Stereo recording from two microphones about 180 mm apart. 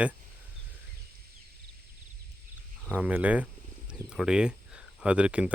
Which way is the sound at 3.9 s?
5° right (ahead or behind).